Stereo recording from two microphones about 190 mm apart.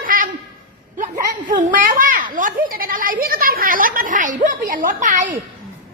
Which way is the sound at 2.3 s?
45° right (ahead or behind).